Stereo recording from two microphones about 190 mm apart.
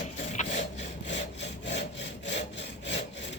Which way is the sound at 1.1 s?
70° left (ahead or behind).